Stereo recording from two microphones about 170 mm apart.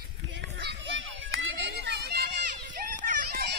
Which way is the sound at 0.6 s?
90° right.